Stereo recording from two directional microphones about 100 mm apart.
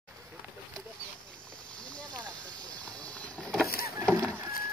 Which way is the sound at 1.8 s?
10° left (ahead or behind).